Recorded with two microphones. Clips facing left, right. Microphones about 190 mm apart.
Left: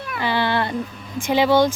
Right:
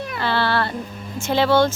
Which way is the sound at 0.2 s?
15° left (ahead or behind).